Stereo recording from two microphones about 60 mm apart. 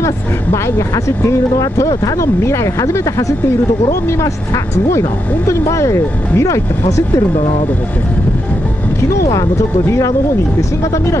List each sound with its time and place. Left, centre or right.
0.0 s speech: left
1.6 s speech: left
5.5 s speech: left
9.3 s speech: left